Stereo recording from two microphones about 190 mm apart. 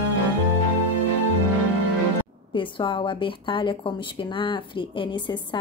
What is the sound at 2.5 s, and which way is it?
A woman's voice, 25° left (ahead or behind).